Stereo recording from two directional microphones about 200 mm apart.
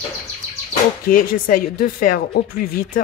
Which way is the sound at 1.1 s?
45° left (ahead or behind).